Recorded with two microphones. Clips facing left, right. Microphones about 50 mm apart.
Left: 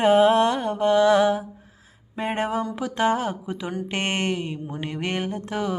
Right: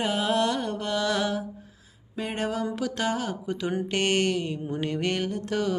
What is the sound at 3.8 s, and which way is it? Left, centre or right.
Mantra, left.